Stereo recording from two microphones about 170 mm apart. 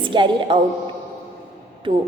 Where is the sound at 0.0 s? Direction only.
30° right (ahead or behind).